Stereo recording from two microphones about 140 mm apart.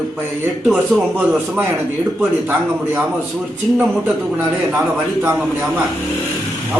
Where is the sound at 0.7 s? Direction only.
10° right (ahead or behind).